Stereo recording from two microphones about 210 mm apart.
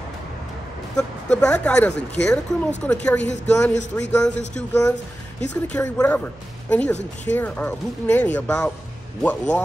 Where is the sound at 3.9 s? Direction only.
10° left (ahead or behind).